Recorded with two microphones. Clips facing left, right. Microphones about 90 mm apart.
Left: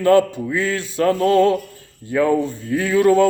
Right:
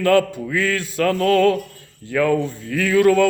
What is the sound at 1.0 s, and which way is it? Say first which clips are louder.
Speech: left 1 dB; 25° left (ahead or behind).